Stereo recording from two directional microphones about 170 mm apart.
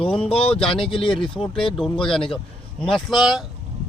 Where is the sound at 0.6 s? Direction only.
30° left (ahead or behind).